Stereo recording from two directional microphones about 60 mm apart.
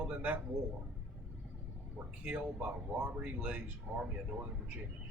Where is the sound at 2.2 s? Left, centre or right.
Centre.